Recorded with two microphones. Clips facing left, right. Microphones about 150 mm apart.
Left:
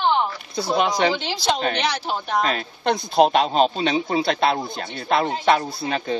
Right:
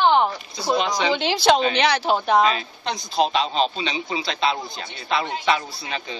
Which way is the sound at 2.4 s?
50° left (ahead or behind).